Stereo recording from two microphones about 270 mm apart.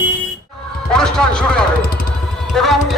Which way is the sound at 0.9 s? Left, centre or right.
Centre.